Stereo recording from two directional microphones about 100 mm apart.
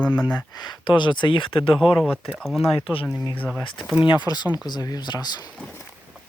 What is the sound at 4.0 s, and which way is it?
Speech, 55° left (ahead or behind).